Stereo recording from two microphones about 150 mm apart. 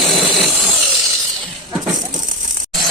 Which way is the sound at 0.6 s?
Centre (ahead or behind).